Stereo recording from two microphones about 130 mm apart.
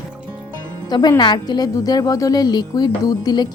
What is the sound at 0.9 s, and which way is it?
A woman's voice, 30° left (ahead or behind).